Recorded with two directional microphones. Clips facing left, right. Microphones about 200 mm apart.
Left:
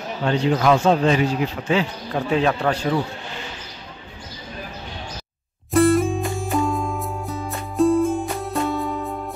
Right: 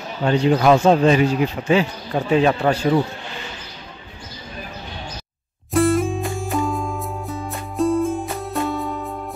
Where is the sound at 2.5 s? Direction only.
20° right (ahead or behind).